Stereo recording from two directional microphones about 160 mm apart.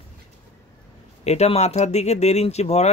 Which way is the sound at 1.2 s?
40° left (ahead or behind).